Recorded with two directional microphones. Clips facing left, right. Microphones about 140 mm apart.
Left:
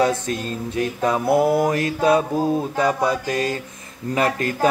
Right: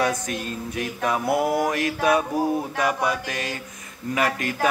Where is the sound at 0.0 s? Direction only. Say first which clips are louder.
Left 4 dB; 30° left (ahead or behind).